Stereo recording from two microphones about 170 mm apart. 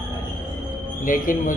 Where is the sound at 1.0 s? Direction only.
55° left (ahead or behind).